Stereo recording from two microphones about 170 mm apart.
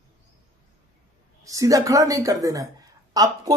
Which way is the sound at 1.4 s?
20° right (ahead or behind).